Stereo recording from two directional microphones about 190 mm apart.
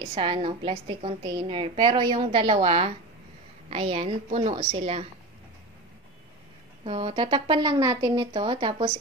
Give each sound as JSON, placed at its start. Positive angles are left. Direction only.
{"t": 0.0, "sound": "a woman's voice", "side_deg": -30}
{"t": 6.8, "sound": "a woman's voice", "side_deg": -30}